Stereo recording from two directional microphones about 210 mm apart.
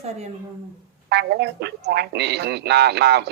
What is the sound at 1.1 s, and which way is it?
A man's voice, 50° right (ahead or behind).